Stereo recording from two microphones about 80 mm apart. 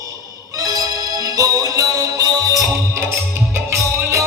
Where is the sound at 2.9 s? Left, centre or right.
Right.